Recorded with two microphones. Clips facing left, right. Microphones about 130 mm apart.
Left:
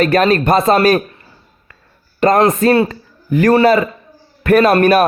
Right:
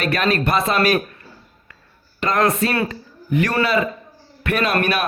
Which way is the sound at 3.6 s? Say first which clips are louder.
Left 7 dB; 45° left (ahead or behind).